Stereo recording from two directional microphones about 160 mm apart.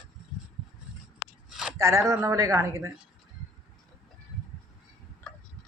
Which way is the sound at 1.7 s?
20° right (ahead or behind).